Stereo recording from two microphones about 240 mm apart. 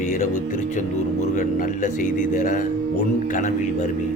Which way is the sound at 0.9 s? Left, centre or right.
Left.